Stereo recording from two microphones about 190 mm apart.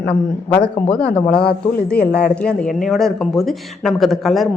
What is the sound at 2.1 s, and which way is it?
Speech, 55° left (ahead or behind).